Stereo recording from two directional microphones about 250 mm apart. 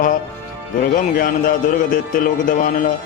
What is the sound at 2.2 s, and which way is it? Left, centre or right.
Speech, left.